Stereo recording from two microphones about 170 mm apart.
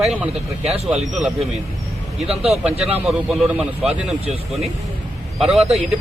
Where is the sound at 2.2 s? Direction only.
35° right (ahead or behind).